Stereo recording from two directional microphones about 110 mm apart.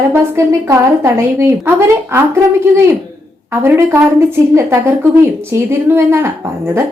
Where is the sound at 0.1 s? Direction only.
20° right (ahead or behind).